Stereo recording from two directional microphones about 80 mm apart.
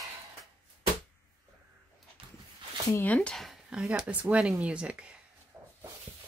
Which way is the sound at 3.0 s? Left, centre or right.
Centre.